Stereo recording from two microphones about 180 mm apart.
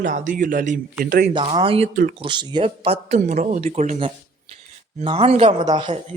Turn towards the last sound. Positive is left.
turn(degrees=-25)  # may be behind; listen again after turning